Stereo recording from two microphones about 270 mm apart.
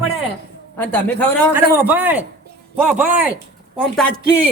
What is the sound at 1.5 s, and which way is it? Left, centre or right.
Speech, centre.